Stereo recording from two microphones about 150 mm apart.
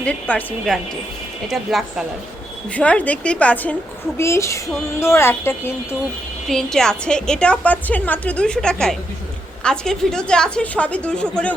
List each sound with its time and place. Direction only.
0.0 s a woman's voice: 10° left (ahead or behind)
2.7 s a woman's voice: 10° left (ahead or behind)
4.2 s female singing: 20° left (ahead or behind)
4.9 s a woman's voice: 15° left (ahead or behind)
6.5 s a woman's voice: 5° left (ahead or behind)